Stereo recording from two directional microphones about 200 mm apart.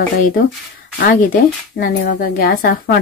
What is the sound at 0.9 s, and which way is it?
Speech, 45° left (ahead or behind).